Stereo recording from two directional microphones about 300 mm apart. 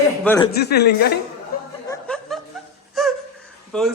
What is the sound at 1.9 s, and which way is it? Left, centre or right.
Chuckle, centre.